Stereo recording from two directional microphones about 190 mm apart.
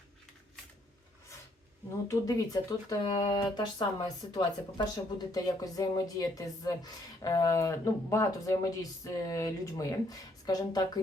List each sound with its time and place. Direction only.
2.0 s speech: 20° left (ahead or behind)